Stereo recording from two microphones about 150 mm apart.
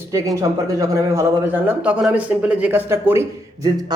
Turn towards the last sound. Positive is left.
turn(degrees=-15)  # may be behind; listen again after turning